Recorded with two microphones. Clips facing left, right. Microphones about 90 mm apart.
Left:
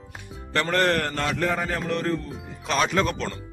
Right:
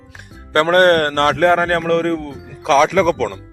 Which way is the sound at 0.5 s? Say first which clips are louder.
Right 10 dB; 60° right (ahead or behind).